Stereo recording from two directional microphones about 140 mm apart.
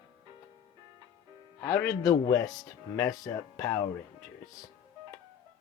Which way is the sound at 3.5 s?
20° left (ahead or behind).